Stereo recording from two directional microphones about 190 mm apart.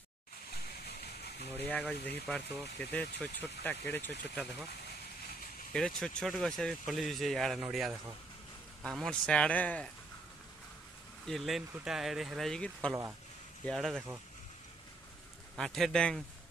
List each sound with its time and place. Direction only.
0.8 s a sound: 60° left (ahead or behind)
1.7 s speech: 5° left (ahead or behind)
5.7 s speech: 5° left (ahead or behind)
11.2 s speech: centre (ahead or behind)
15.5 s speech: centre (ahead or behind)